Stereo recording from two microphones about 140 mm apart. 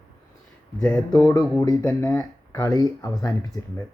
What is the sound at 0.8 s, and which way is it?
Speech, 10° left (ahead or behind).